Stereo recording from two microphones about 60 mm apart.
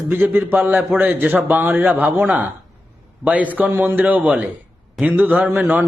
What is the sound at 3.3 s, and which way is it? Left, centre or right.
A man's voice, right.